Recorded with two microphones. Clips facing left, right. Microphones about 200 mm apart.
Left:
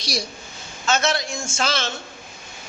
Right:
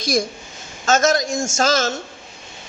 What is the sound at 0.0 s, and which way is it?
A woman's voice, 50° right (ahead or behind).